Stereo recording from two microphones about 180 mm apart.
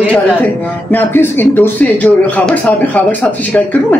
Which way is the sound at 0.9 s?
10° left (ahead or behind).